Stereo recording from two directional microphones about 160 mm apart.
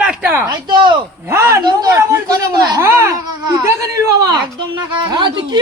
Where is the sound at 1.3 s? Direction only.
15° right (ahead or behind).